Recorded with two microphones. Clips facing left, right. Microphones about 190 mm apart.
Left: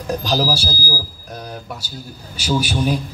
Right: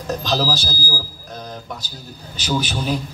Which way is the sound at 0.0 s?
10° left (ahead or behind).